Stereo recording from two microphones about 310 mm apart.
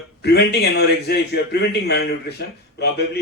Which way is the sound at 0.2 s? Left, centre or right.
Left.